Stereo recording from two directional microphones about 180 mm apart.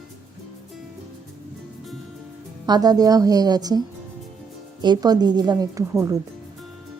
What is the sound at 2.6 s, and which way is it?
A woman's voice, 20° right (ahead or behind).